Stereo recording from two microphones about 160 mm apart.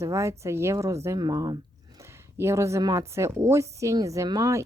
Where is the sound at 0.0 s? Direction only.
20° right (ahead or behind).